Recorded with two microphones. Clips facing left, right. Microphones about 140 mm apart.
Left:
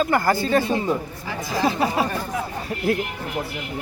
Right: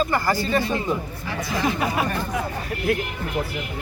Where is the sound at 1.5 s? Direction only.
30° left (ahead or behind).